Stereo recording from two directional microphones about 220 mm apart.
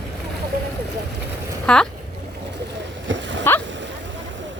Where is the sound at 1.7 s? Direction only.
5° left (ahead or behind).